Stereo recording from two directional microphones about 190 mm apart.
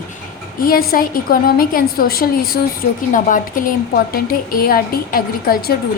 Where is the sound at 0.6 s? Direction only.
50° left (ahead or behind).